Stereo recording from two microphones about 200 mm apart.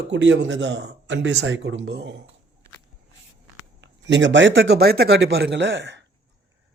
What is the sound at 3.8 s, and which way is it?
A man's voice, 65° right (ahead or behind).